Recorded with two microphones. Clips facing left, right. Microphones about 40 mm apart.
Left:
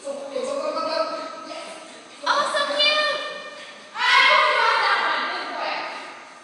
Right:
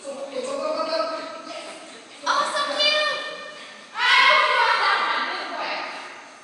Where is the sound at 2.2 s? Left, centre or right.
Left.